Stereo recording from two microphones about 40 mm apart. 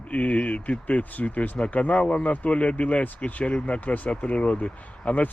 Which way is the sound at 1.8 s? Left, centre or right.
Left.